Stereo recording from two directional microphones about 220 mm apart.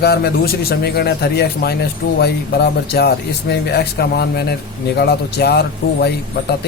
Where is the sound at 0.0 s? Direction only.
45° left (ahead or behind).